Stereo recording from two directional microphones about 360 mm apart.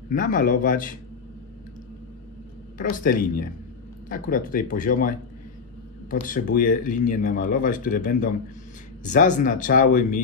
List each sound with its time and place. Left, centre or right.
0.1 s speech: left
2.8 s speech: left